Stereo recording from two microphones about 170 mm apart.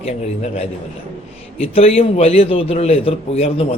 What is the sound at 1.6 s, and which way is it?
A man's voice, 35° left (ahead or behind).